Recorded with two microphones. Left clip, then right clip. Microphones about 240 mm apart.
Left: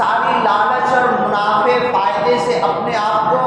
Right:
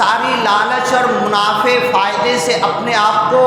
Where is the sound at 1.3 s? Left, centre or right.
Right.